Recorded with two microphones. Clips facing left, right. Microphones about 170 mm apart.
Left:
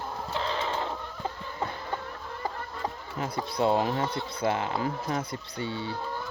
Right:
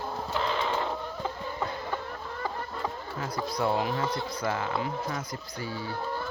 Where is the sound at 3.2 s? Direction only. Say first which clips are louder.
Left 2 dB; 25° left (ahead or behind).